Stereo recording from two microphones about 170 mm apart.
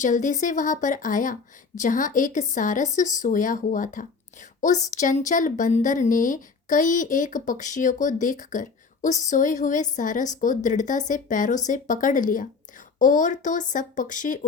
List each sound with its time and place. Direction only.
0.0 s a woman's voice: 50° left (ahead or behind)